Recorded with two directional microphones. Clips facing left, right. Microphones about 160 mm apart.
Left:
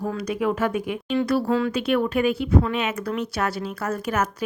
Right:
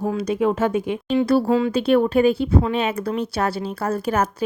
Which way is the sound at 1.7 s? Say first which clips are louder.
Right 5 dB; 30° right (ahead or behind).